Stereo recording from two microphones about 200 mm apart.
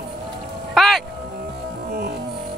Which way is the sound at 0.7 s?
Centre (ahead or behind).